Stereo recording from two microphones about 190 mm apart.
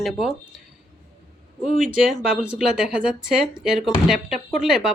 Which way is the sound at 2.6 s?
5° right (ahead or behind).